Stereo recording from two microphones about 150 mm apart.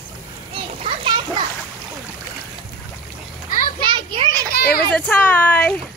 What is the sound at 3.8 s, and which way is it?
Children playing, 30° right (ahead or behind).